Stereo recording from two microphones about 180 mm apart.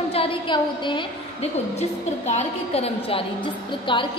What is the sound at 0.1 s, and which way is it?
A woman's voice, 30° left (ahead or behind).